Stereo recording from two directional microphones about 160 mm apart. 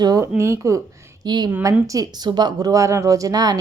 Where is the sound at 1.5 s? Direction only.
15° right (ahead or behind).